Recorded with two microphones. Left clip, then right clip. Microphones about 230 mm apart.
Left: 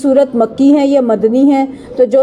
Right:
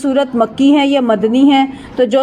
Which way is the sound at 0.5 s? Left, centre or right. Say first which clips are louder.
Left 1 dB; centre.